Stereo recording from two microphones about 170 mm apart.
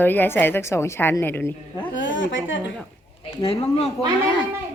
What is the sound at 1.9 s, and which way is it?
Speech, 90° left.